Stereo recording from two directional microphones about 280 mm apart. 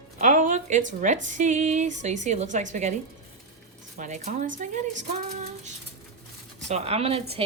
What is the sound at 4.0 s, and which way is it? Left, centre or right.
Speech, right.